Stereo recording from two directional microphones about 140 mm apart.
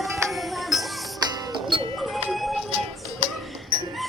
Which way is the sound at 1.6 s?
35° right (ahead or behind).